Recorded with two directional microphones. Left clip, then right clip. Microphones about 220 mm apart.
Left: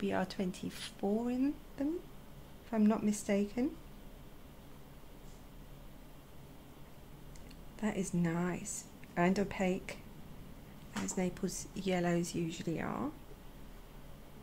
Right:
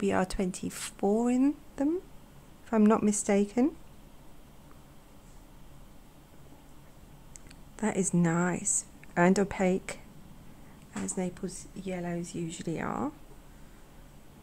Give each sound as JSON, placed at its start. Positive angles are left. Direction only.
{"t": 0.0, "sound": "speech", "side_deg": -30}
{"t": 7.7, "sound": "speech", "side_deg": -30}
{"t": 11.1, "sound": "speech", "side_deg": -15}
{"t": 11.4, "sound": "a woman's voice", "side_deg": 0}
{"t": 12.4, "sound": "speech", "side_deg": -15}